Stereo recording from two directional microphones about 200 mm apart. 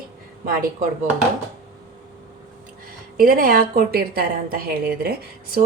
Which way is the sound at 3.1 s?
45° right (ahead or behind).